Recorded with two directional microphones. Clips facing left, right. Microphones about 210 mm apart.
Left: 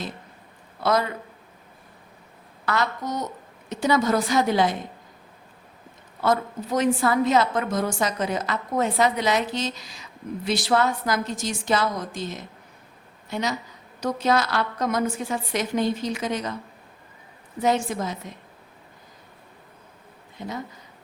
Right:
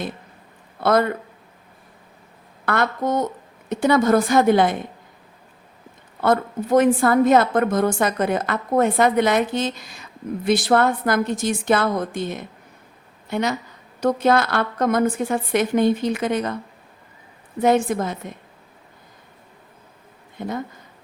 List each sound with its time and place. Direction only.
0.8 s a woman's voice: 55° right (ahead or behind)
2.6 s a woman's voice: 55° right (ahead or behind)
6.2 s a woman's voice: 55° right (ahead or behind)
17.6 s a woman's voice: 55° right (ahead or behind)
20.4 s a woman's voice: 55° right (ahead or behind)